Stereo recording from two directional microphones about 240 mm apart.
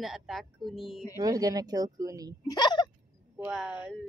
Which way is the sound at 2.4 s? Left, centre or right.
Centre.